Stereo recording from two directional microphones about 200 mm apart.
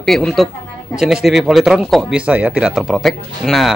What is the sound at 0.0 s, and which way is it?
Speech, 5° left (ahead or behind).